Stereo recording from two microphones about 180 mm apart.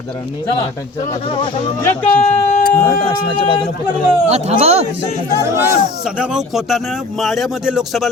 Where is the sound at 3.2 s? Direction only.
30° left (ahead or behind).